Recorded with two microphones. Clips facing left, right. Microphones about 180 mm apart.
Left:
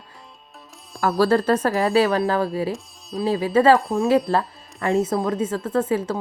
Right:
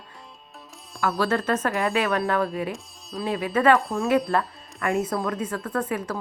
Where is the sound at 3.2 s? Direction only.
30° left (ahead or behind).